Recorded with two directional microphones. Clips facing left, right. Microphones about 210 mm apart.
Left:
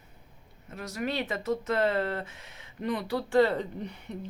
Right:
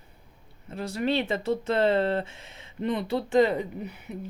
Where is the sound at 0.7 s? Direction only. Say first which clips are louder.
Right 6 dB; 30° right (ahead or behind).